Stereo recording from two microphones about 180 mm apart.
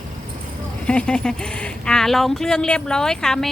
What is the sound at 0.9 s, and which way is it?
A woman's voice, 5° left (ahead or behind).